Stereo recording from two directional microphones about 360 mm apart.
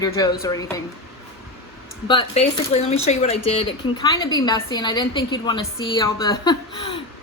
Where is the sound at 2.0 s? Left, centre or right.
Centre.